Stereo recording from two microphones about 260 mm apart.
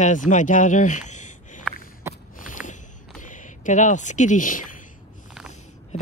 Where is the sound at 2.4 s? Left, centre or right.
Left.